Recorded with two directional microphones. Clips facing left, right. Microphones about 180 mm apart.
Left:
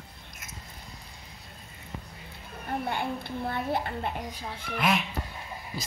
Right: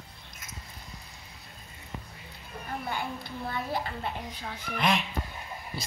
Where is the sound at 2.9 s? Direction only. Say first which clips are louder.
Left 3 dB; 60° left (ahead or behind).